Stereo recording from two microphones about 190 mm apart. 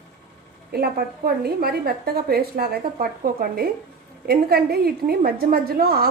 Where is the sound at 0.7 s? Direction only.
50° right (ahead or behind).